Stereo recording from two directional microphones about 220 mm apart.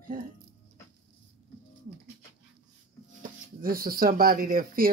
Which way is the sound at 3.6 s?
40° right (ahead or behind).